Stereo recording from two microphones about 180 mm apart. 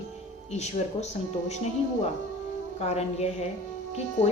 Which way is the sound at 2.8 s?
35° left (ahead or behind).